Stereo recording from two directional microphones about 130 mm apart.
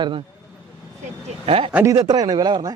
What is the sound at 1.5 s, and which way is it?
Speech, 50° right (ahead or behind).